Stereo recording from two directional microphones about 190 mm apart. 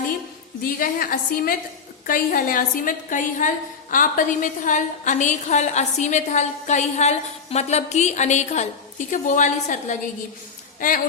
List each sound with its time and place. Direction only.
0.6 s a woman's voice: 50° left (ahead or behind)